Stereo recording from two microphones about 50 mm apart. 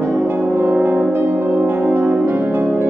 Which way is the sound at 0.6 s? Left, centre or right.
Right.